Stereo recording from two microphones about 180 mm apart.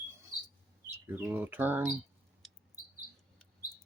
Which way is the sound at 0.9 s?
15° right (ahead or behind).